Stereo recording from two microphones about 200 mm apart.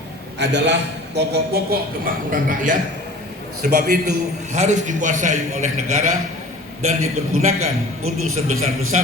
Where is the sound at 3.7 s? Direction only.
55° right (ahead or behind).